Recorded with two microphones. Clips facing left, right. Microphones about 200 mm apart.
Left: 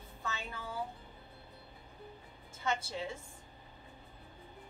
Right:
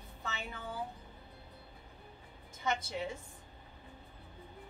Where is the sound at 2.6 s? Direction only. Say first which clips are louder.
Right 1 dB; 15° right (ahead or behind).